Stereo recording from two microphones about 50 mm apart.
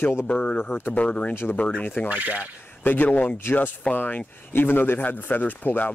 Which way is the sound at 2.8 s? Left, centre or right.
Left.